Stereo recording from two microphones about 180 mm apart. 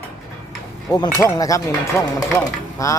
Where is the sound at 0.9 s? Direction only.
20° left (ahead or behind).